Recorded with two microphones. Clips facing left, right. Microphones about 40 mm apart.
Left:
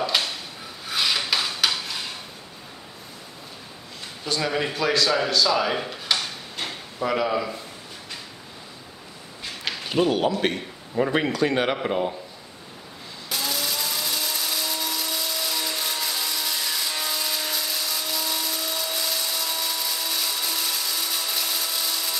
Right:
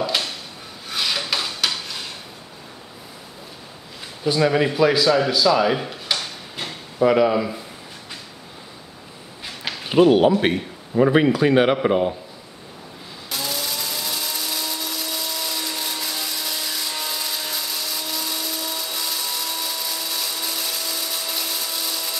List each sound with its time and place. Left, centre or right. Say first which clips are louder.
0.0 s a sound: right 1 dB; centre
0.8 s filing: even; centre
4.2 s speech: right 7 dB; centre
9.4 s a sound: right 1 dB; centre
9.8 s a man's voice: right 8 dB; centre
13.3 s ratchet: even; centre